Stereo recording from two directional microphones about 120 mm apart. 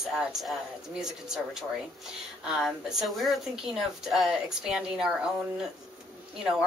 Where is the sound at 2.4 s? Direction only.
5° right (ahead or behind).